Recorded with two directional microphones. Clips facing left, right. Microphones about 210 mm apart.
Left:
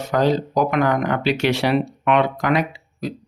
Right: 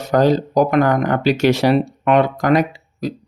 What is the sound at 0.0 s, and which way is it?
Speech, 40° right (ahead or behind).